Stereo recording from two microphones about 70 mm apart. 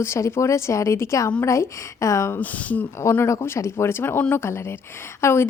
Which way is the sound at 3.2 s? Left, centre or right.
Left.